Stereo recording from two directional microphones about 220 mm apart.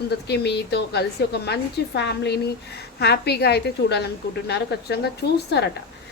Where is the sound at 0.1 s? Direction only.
50° left (ahead or behind).